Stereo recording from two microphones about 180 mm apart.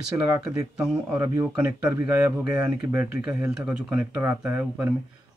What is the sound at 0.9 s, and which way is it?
Speech, 20° right (ahead or behind).